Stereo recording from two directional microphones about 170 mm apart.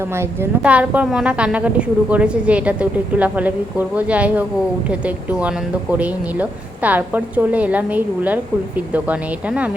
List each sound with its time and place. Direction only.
0.1 s speech: 15° right (ahead or behind)